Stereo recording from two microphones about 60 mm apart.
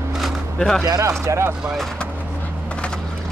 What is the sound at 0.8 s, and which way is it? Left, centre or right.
Speech, right.